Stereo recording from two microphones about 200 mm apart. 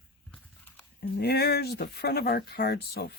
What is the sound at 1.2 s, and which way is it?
Speech, 55° left (ahead or behind).